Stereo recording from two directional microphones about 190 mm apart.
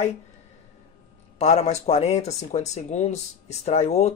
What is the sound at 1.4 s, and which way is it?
Speech, 35° left (ahead or behind).